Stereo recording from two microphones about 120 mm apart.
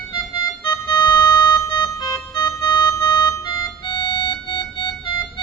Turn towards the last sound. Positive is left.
turn(degrees=45)  # may be behind; listen again after turning